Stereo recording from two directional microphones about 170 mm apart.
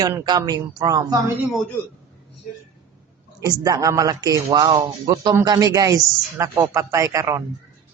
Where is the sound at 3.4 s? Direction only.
20° right (ahead or behind).